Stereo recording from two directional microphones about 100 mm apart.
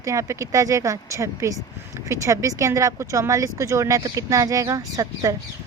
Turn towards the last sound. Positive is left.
turn(degrees=-35)  # may be behind; listen again after turning